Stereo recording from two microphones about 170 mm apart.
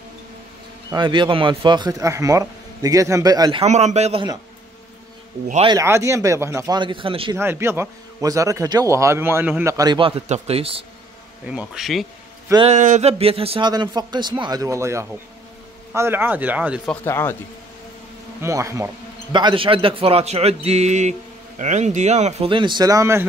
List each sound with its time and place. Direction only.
0.9 s a man's voice: 30° right (ahead or behind)
3.6 s a man's voice: 40° right (ahead or behind)
5.7 s a man's voice: 15° right (ahead or behind)
7.3 s a man's voice: 15° right (ahead or behind); by 10.9 s 35° right (ahead or behind)
11.4 s speech: 5° right (ahead or behind)
12.6 s a man's voice: 45° right (ahead or behind); by 16.8 s 10° right (ahead or behind)
16.8 s speech: 10° left (ahead or behind)
18.4 s speech: 15° right (ahead or behind)
19.3 s a man's voice: 30° right (ahead or behind)
22.5 s a man's voice: 30° right (ahead or behind)